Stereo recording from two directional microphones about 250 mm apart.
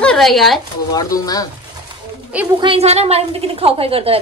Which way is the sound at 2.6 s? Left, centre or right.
Right.